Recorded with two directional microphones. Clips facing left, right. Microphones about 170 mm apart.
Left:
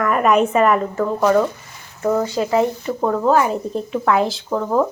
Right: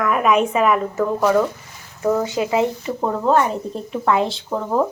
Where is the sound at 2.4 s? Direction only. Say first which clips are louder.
Left 2 dB; 15° right (ahead or behind).